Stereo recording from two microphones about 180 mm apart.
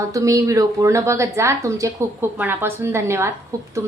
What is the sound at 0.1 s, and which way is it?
Speech, 20° right (ahead or behind).